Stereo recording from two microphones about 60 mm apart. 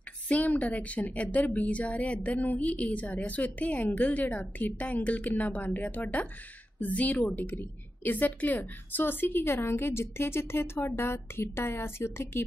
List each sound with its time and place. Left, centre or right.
0.3 s a woman's voice: left